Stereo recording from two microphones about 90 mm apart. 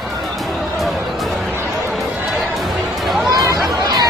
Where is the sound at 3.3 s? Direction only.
40° right (ahead or behind).